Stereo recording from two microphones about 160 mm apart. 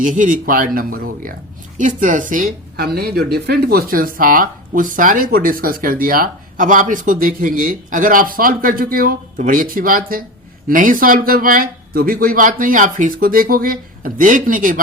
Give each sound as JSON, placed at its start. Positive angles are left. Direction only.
{"t": 0.0, "sound": "speech", "side_deg": -55}